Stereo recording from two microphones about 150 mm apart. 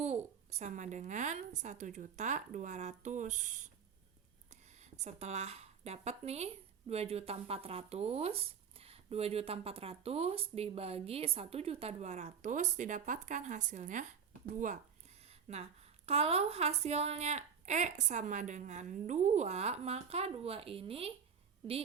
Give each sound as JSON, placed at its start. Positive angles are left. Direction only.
{"t": 0.5, "sound": "speech", "side_deg": -50}
{"t": 15.2, "sound": "speech", "side_deg": -45}